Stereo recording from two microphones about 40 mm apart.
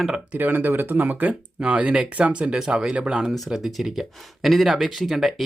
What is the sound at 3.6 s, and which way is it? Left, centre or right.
Speech, centre.